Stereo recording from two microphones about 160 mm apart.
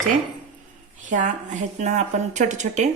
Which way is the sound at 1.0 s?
50° right (ahead or behind).